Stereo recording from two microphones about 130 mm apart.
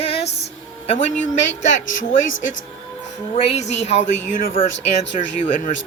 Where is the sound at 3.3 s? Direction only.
55° left (ahead or behind); by 4.5 s 85° left.